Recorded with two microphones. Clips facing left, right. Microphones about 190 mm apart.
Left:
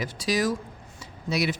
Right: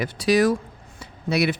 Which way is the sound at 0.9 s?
60° right (ahead or behind).